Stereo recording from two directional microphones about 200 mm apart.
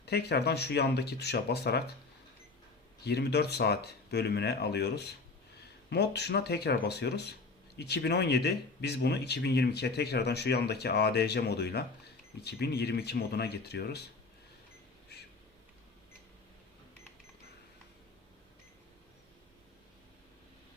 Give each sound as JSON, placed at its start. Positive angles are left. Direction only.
{"t": 0.0, "sound": "speech", "side_deg": 55}
{"t": 3.0, "sound": "speech", "side_deg": 55}